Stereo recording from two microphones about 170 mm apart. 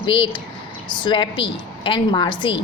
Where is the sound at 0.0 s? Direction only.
30° left (ahead or behind).